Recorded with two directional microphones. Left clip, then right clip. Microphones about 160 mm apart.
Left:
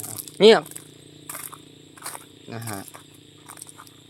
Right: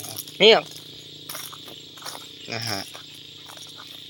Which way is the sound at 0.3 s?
40° left (ahead or behind).